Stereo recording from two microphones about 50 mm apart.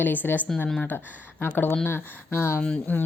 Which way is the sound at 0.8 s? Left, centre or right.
Left.